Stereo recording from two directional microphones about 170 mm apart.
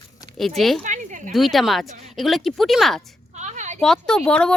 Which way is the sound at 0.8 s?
45° right (ahead or behind).